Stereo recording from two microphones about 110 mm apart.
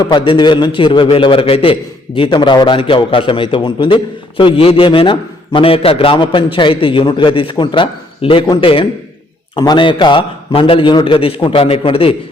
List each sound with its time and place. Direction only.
0.0 s a man's voice: 45° left (ahead or behind)